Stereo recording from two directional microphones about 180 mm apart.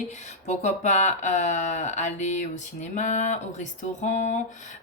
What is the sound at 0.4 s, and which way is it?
Speech, 40° left (ahead or behind).